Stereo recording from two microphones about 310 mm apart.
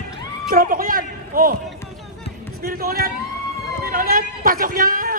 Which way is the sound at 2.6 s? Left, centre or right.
Right.